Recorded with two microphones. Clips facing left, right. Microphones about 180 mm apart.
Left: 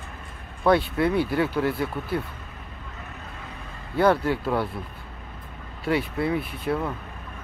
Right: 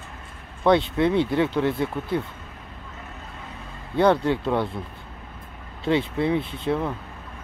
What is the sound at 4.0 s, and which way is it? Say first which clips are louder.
Speech: right 1 dB; 25° right (ahead or behind).